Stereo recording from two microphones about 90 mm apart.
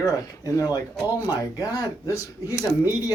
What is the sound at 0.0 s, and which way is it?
Speech, 40° left (ahead or behind).